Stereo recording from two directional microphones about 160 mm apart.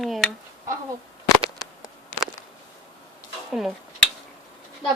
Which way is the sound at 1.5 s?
25° left (ahead or behind).